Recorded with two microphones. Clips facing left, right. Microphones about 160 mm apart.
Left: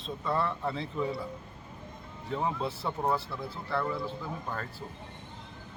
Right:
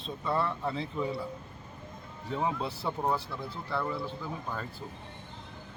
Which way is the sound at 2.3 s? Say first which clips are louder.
Even; centre (ahead or behind).